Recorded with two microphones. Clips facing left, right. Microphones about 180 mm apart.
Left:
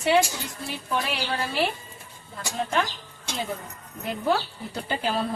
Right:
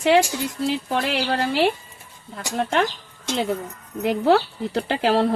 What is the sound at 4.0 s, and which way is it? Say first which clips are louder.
Speech: right 8 dB; 80° right.